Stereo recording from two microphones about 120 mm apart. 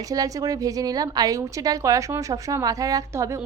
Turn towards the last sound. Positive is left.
turn(degrees=-25)  # may be behind; listen again after turning